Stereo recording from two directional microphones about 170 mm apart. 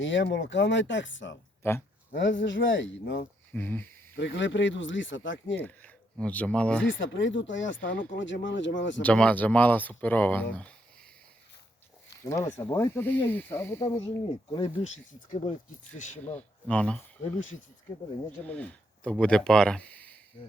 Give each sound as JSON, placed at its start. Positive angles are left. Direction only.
{"t": 0.0, "sound": "speech", "side_deg": 90}
{"t": 1.6, "sound": "speech", "side_deg": 15}
{"t": 2.1, "sound": "speech", "side_deg": 90}
{"t": 3.5, "sound": "speech", "side_deg": 10}
{"t": 4.2, "sound": "speech", "side_deg": 90}
{"t": 5.5, "sound": "speech", "side_deg": 10}
{"t": 7.0, "sound": "speech", "side_deg": 90}
{"t": 9.0, "sound": "speech", "side_deg": 5}
{"t": 12.2, "sound": "speech", "side_deg": 15}
{"t": 14.5, "sound": "speech", "side_deg": 35}
{"t": 16.3, "sound": "speech", "side_deg": 10}
{"t": 18.4, "sound": "speech", "side_deg": 5}